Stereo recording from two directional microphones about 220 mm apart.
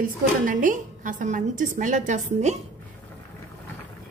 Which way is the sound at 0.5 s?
40° right (ahead or behind).